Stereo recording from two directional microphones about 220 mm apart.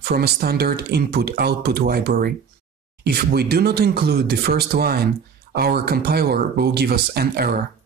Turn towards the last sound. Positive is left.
turn(degrees=-45)  # may be behind; listen again after turning